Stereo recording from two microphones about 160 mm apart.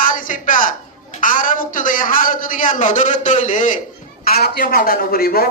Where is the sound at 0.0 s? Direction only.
55° left (ahead or behind).